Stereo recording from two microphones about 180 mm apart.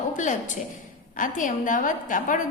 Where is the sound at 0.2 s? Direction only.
45° left (ahead or behind).